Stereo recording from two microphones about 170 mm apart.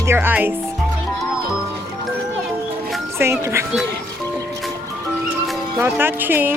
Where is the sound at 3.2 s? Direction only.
15° right (ahead or behind).